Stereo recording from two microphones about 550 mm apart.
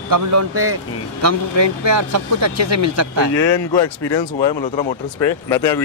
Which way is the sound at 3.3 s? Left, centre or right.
Left.